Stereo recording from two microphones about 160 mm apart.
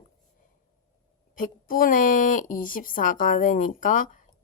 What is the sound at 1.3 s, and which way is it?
A woman's voice, 60° left (ahead or behind).